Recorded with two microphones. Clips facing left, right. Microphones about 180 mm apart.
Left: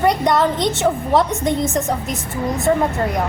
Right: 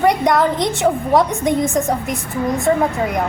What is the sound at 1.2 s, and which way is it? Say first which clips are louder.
Speech: right 1 dB; 15° right (ahead or behind).